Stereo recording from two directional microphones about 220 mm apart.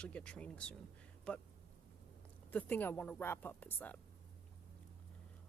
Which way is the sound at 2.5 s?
10° left (ahead or behind).